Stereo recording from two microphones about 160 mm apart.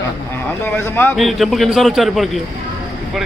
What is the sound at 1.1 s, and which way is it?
A man's voice, centre (ahead or behind).